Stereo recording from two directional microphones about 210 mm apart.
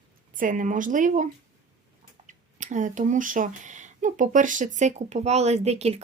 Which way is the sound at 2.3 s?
35° right (ahead or behind).